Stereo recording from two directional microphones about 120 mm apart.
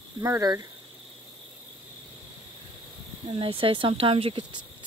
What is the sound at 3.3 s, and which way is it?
Speech, 50° right (ahead or behind).